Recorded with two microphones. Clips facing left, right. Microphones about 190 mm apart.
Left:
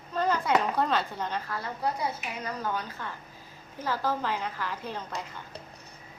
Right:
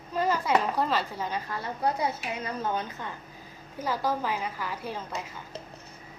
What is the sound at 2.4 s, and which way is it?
A woman's voice, 25° right (ahead or behind).